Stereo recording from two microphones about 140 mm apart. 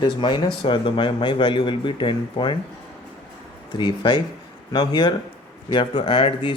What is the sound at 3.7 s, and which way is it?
Speech, 35° left (ahead or behind).